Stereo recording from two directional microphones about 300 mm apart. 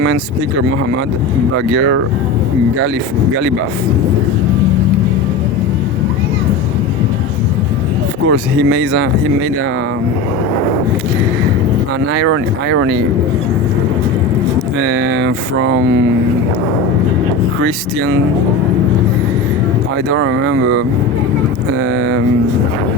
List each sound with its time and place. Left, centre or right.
1.5 s speech: right
8.3 s speech: right
12.2 s speech: right
14.8 s speech: right
20.1 s speech: right